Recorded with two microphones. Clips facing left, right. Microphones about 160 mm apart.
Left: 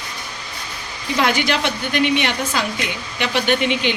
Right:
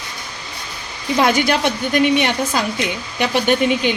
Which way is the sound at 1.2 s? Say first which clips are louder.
Right 3 dB; 45° right (ahead or behind).